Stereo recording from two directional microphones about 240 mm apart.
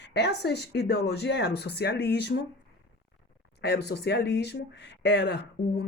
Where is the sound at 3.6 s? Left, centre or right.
Left.